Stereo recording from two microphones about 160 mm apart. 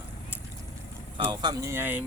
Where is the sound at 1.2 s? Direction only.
20° right (ahead or behind).